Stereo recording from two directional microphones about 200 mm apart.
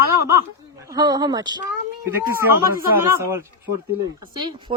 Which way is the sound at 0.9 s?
20° right (ahead or behind).